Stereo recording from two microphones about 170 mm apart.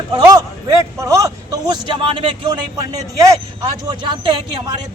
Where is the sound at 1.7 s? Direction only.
30° right (ahead or behind).